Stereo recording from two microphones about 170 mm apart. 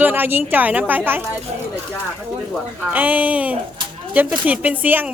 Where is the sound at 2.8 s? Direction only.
10° right (ahead or behind).